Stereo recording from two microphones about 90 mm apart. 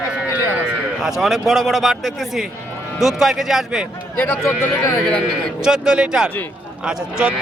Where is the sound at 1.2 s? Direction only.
Centre (ahead or behind).